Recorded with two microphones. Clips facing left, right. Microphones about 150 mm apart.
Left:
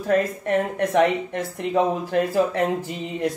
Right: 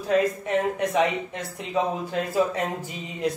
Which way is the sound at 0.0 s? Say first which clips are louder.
Left 1 dB; 55° left (ahead or behind).